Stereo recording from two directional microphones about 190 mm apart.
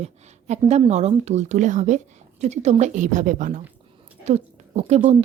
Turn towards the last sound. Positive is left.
turn(degrees=-35)  # may be behind; listen again after turning